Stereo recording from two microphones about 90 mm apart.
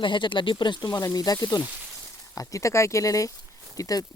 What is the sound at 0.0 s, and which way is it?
Speech, 65° left (ahead or behind).